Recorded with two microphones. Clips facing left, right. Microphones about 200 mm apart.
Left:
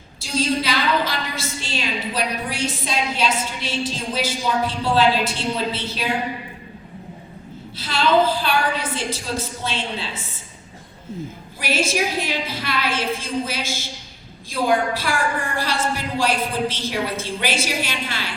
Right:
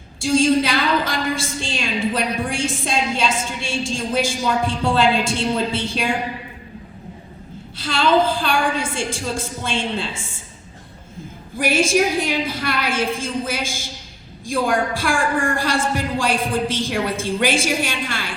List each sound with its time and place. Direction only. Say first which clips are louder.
0.3 s a woman's voice: right 5 dB; 50° right (ahead or behind)
7.8 s a woman's voice: right 1 dB; 50° right (ahead or behind)
11.5 s a woman's voice: right 5 dB; 50° right (ahead or behind)